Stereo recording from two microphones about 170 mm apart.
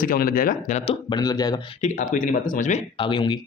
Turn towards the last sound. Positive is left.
turn(degrees=30)  # may be behind; listen again after turning